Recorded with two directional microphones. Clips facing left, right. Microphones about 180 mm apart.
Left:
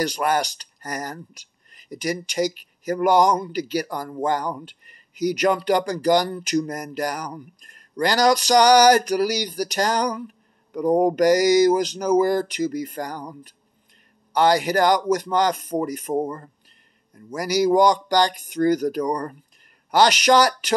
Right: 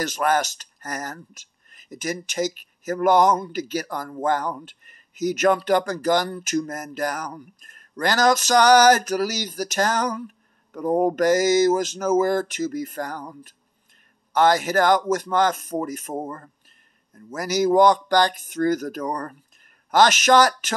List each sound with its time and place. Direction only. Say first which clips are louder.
0.0 s speech: even; 15° left (ahead or behind)